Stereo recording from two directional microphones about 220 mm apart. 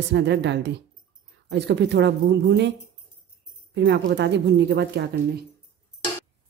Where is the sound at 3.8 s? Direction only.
50° right (ahead or behind).